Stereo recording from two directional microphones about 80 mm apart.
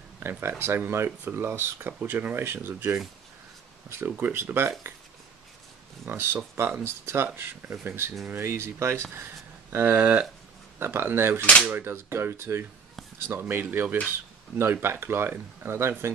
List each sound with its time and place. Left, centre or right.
0.2 s speech: right
6.0 s speech: right